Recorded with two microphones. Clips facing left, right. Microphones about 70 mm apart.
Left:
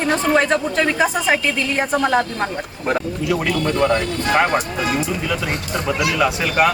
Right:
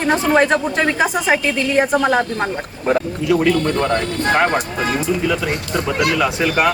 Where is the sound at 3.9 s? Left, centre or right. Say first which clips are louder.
Right 1 dB; right.